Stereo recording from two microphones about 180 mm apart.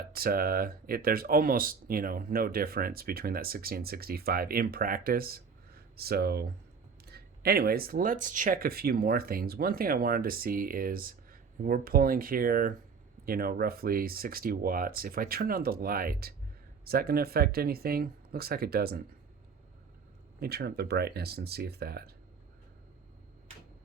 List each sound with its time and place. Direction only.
0.1 s speech: 55° right (ahead or behind)
20.4 s speech: 60° right (ahead or behind)